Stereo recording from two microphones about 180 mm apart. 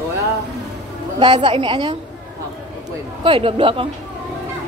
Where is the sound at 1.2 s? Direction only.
25° right (ahead or behind).